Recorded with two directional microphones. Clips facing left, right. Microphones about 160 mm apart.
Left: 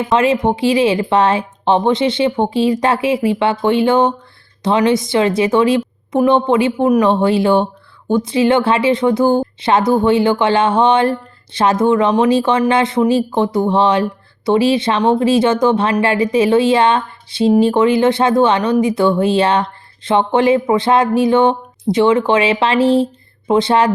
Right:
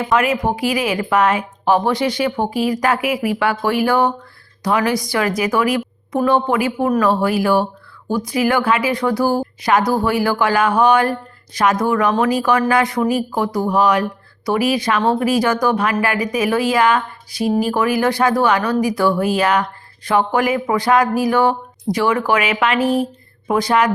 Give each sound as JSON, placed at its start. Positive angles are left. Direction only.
{"t": 0.0, "sound": "a woman's voice", "side_deg": 25}